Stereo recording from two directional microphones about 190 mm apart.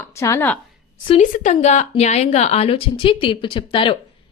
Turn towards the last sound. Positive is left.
turn(degrees=25)  # may be behind; listen again after turning